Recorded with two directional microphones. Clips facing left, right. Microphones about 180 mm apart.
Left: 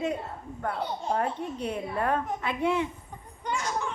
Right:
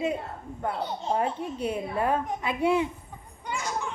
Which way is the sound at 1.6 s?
5° right (ahead or behind).